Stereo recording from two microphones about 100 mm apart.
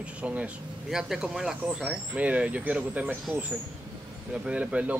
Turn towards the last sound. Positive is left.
turn(degrees=-10)  # may be behind; listen again after turning